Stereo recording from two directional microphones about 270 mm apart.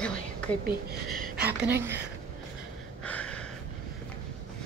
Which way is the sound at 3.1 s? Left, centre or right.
Centre.